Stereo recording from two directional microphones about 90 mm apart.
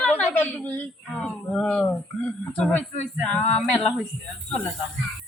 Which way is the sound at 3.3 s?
15° left (ahead or behind).